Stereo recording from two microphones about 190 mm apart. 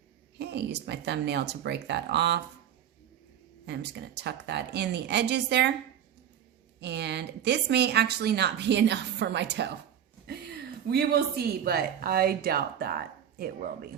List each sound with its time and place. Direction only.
0.3 s a woman's voice: 65° right (ahead or behind)
3.7 s a woman's voice: 65° right (ahead or behind)
6.7 s a woman's voice: 65° right (ahead or behind)